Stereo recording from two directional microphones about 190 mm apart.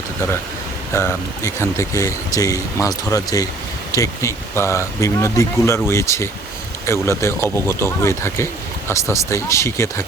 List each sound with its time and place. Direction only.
0.9 s speech: 15° left (ahead or behind)